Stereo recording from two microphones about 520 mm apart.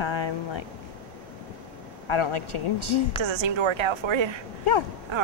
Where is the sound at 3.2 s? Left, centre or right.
Right.